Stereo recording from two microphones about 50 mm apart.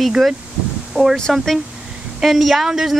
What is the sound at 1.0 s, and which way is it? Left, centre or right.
Speech, right.